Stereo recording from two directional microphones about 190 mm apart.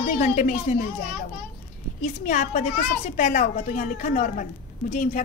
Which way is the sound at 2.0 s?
40° left (ahead or behind).